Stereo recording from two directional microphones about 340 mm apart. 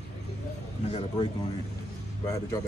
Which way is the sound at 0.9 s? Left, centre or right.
Centre.